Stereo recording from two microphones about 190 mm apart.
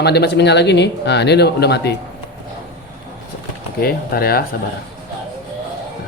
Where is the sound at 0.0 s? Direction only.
60° left (ahead or behind).